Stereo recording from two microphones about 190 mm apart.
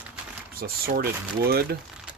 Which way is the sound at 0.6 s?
55° right (ahead or behind).